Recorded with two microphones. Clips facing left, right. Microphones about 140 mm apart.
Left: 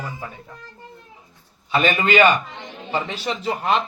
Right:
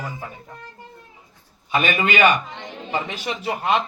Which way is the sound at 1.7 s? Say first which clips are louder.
Left 2 dB; 40° left (ahead or behind).